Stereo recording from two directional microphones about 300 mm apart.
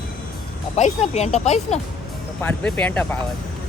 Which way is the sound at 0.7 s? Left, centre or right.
Left.